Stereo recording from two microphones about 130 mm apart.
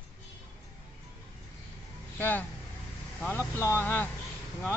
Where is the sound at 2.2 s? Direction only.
15° left (ahead or behind).